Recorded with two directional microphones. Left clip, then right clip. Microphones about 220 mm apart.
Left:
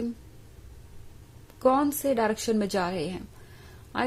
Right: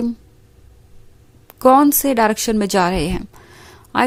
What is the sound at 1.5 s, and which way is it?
A woman's voice, 35° right (ahead or behind).